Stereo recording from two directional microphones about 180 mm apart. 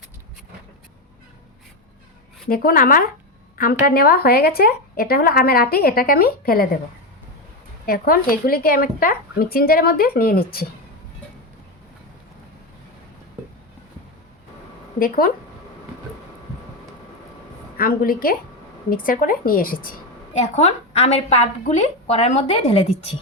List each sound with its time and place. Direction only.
2.5 s a woman's voice: 55° left (ahead or behind)
7.9 s speech: 55° left (ahead or behind)
14.9 s a woman's voice: 55° left (ahead or behind)
17.7 s a woman's voice: 55° left (ahead or behind); by 22.6 s 35° left (ahead or behind)